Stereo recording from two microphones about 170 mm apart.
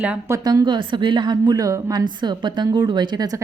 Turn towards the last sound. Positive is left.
turn(degrees=-20)  # may be behind; listen again after turning